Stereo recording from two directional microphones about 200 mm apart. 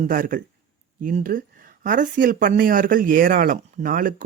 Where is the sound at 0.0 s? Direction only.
40° right (ahead or behind).